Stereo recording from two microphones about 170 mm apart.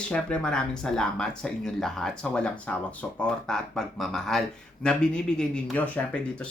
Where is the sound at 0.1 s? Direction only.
5° left (ahead or behind).